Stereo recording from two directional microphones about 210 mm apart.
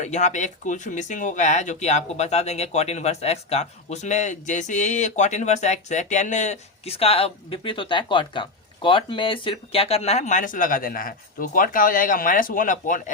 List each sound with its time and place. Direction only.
0.0 s speech: 35° left (ahead or behind)